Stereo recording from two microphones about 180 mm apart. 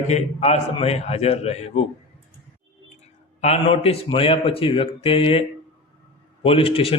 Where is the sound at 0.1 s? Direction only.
35° left (ahead or behind).